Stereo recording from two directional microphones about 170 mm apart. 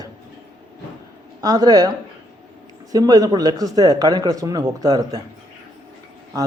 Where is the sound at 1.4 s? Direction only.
20° right (ahead or behind).